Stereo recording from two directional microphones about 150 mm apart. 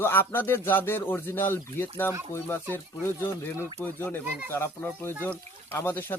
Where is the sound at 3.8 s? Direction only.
15° left (ahead or behind).